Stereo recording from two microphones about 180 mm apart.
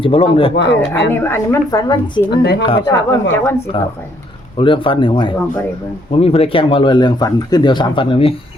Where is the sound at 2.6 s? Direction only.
25° left (ahead or behind).